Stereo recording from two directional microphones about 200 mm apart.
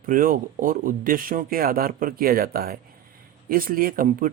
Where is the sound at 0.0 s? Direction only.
45° right (ahead or behind).